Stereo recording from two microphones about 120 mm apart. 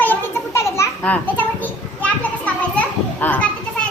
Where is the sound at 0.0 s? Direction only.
20° left (ahead or behind).